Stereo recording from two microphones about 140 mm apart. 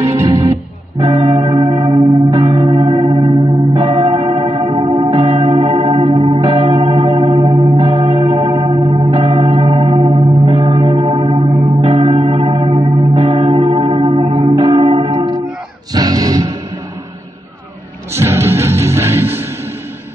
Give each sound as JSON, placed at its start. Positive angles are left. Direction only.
{"t": 0.0, "sound": "music", "side_deg": -25}
{"t": 18.1, "sound": "music", "side_deg": -15}